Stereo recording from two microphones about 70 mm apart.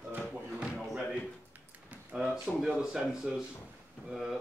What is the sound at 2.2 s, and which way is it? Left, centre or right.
Speech, centre.